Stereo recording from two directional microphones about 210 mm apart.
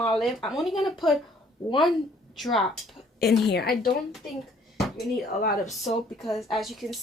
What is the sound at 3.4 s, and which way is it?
Speech, 50° left (ahead or behind).